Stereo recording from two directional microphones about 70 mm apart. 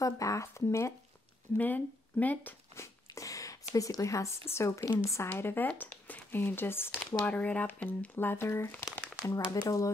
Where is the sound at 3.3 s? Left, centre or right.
Left.